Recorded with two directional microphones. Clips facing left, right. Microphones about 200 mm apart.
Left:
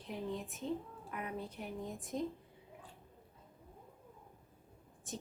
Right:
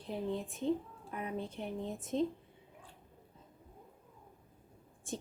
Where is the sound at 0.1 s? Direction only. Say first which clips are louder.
Right 4 dB; 30° right (ahead or behind).